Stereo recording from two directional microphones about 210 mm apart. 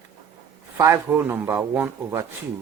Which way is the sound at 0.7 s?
10° right (ahead or behind).